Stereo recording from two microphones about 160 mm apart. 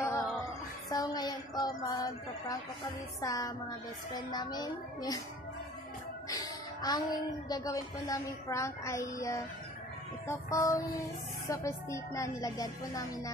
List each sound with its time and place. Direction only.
0.0 s music: 15° left (ahead or behind)
0.9 s child singing: 25° left (ahead or behind)
3.2 s a woman's voice: 25° left (ahead or behind)
6.2 s a woman's voice: 20° left (ahead or behind)